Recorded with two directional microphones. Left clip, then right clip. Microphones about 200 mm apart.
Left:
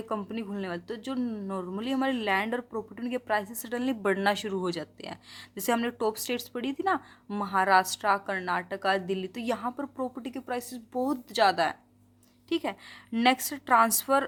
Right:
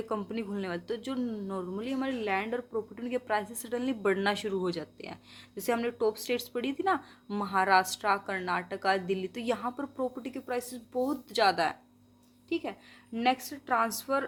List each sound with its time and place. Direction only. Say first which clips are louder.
0.1 s speech: left 3 dB; 15° left (ahead or behind)
12.5 s a woman's voice: left 4 dB; 35° left (ahead or behind)